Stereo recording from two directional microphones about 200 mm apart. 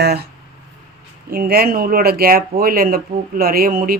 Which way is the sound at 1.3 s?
50° right (ahead or behind).